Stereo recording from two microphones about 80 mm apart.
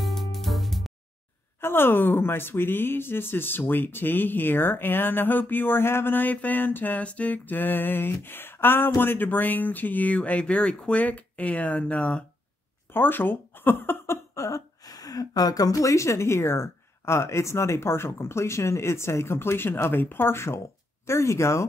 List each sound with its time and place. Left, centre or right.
0.0 s music: centre
1.6 s speech: left
12.9 s speech: left